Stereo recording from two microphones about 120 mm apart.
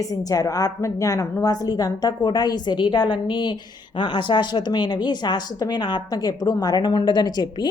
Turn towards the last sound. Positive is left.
turn(degrees=35)  # may be behind; listen again after turning